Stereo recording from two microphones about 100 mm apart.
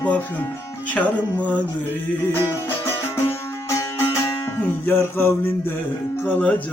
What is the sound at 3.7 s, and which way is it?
Music, 25° left (ahead or behind).